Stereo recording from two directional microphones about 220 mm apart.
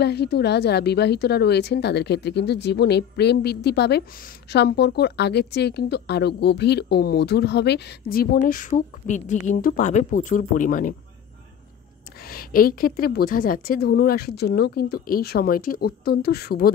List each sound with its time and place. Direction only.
0.0 s a woman's voice: 50° left (ahead or behind)
12.3 s a woman's voice: 40° left (ahead or behind)